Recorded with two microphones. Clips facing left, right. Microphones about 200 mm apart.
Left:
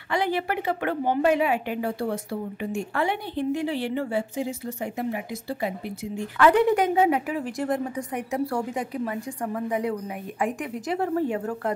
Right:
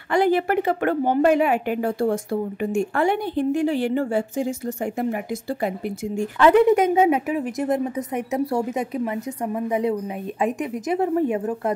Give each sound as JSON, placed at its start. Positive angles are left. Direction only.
{"t": 0.1, "sound": "a woman's voice", "side_deg": -50}
{"t": 6.3, "sound": "a woman's voice", "side_deg": -20}